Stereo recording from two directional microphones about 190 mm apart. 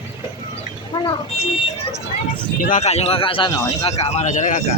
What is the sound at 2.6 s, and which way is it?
Speech, 45° left (ahead or behind).